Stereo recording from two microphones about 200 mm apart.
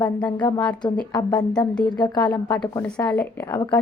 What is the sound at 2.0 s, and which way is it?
Speech, 20° left (ahead or behind).